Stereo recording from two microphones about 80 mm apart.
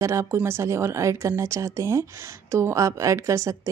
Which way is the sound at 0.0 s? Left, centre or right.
Right.